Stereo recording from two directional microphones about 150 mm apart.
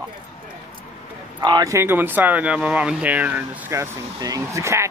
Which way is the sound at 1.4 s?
25° right (ahead or behind).